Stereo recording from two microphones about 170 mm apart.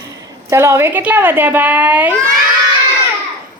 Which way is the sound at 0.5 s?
15° right (ahead or behind).